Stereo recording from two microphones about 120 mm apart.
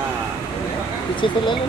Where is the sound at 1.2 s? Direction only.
40° left (ahead or behind).